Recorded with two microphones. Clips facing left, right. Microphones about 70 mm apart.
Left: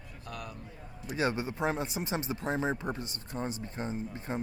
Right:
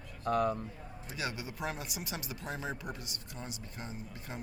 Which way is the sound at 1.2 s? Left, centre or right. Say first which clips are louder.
Left 8 dB; left.